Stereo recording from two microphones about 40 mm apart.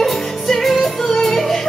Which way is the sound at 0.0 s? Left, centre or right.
Centre.